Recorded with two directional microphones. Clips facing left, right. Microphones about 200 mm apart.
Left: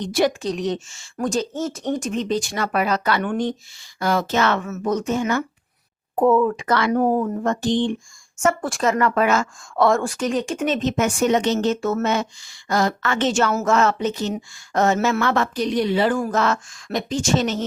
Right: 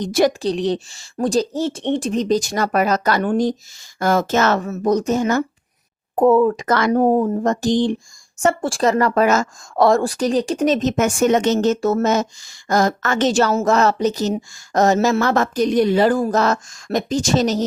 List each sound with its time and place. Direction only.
0.0 s a woman's voice: 40° right (ahead or behind)
6.9 s speech: 25° right (ahead or behind)
7.4 s a woman's voice: 40° right (ahead or behind)
14.9 s speech: 25° right (ahead or behind)
15.2 s a woman's voice: 40° right (ahead or behind)